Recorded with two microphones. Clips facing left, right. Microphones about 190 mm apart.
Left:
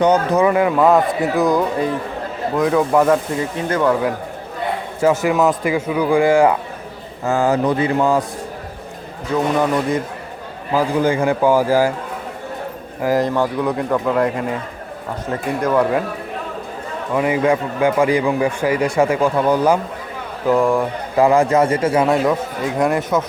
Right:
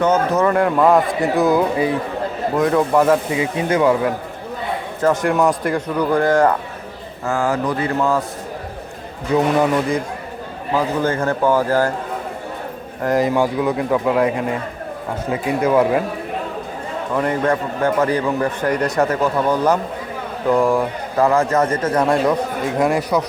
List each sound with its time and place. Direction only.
0.0 s speech: 15° left (ahead or behind); by 3.9 s 15° right (ahead or behind)
4.9 s a man's voice: 10° left (ahead or behind)
7.3 s a sound: 20° left (ahead or behind)
10.8 s a man's voice: 10° left (ahead or behind)
13.0 s a man's voice: 5° left (ahead or behind)
13.2 s speech: 10° right (ahead or behind)
17.2 s a man's voice: 10° left (ahead or behind)
21.2 s a man's voice: 15° left (ahead or behind)